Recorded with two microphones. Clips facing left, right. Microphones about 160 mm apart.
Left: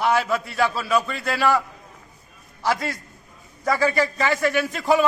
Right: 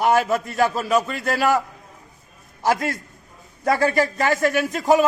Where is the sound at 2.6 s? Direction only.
45° right (ahead or behind).